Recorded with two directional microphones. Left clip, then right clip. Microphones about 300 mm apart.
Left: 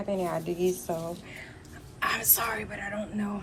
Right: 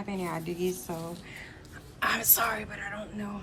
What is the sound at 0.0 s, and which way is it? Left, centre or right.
A woman's voice, centre.